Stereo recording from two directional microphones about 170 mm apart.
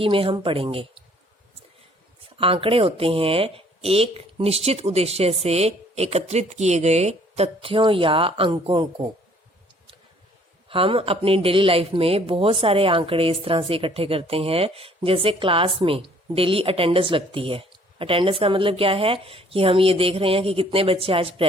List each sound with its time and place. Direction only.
0.0 s speech: 30° right (ahead or behind)
2.3 s speech: 35° right (ahead or behind)
10.7 s speech: 30° right (ahead or behind)